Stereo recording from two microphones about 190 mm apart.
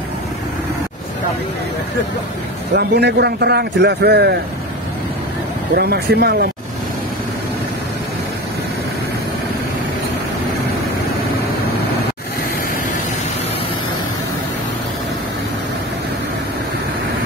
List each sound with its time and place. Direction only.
2.7 s a man's voice: 60° right (ahead or behind)
5.8 s a man's voice: 55° right (ahead or behind)